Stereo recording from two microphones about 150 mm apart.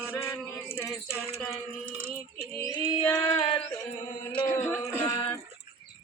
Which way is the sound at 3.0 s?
10° left (ahead or behind).